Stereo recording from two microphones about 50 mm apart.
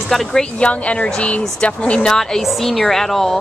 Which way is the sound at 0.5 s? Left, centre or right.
Left.